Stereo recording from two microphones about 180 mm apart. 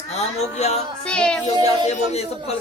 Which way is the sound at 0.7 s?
5° left (ahead or behind).